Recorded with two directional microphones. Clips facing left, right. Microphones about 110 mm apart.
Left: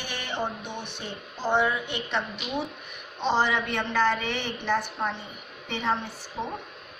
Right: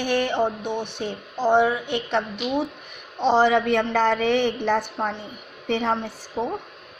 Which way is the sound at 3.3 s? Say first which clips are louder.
Right 7 dB; 55° right (ahead or behind).